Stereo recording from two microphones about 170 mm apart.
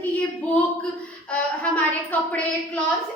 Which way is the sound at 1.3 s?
10° left (ahead or behind).